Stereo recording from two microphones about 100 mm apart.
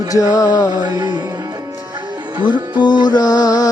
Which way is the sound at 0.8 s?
35° right (ahead or behind).